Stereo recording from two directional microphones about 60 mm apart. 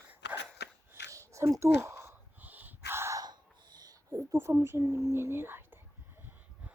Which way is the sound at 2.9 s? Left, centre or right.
Right.